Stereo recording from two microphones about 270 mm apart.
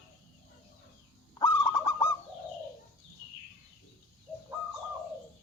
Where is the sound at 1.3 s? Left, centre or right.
Centre.